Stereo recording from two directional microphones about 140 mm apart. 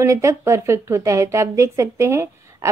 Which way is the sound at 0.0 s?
20° right (ahead or behind).